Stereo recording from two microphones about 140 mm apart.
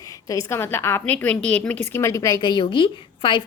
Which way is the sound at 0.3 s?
20° left (ahead or behind).